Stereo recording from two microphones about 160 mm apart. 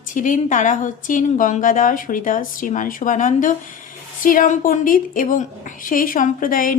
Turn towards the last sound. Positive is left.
turn(degrees=60)  # may be behind; listen again after turning